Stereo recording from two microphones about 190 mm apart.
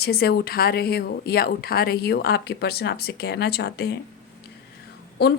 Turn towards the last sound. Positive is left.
turn(degrees=60)  # may be behind; listen again after turning